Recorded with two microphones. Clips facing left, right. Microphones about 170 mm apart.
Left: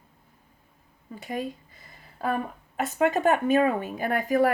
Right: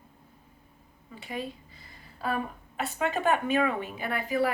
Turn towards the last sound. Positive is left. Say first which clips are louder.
# left 5 dB
turn(degrees=45)  # may be behind; listen again after turning